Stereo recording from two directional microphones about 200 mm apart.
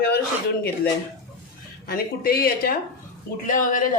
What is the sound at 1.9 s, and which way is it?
A man's voice, 50° left (ahead or behind).